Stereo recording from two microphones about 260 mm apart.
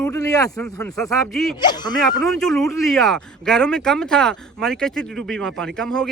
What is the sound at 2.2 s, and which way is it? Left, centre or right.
Speech, centre.